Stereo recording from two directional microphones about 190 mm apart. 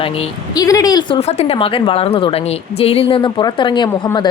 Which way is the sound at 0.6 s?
20° left (ahead or behind).